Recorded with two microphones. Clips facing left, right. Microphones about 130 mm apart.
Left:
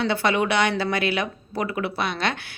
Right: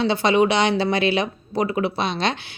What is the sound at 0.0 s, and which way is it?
Speech, 20° right (ahead or behind).